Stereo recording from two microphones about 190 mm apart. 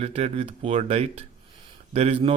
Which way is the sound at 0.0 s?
35° right (ahead or behind).